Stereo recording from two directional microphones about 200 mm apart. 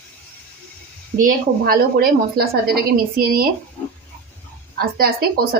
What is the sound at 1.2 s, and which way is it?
Speech, 45° right (ahead or behind).